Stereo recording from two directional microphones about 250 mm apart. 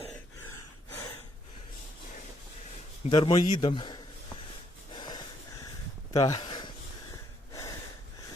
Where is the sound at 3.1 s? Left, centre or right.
Centre.